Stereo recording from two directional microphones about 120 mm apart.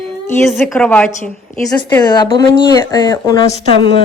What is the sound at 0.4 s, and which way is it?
Speech, centre (ahead or behind).